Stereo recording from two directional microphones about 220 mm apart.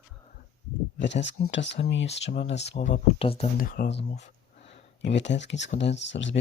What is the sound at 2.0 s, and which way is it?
Speech, 30° left (ahead or behind).